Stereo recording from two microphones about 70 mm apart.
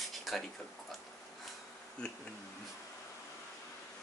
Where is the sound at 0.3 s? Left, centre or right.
Centre.